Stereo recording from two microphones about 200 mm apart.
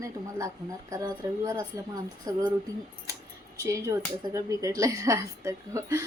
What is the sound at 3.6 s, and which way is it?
A woman's voice, 15° right (ahead or behind).